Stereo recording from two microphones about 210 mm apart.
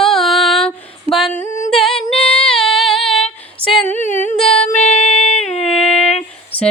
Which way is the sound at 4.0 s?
35° left (ahead or behind).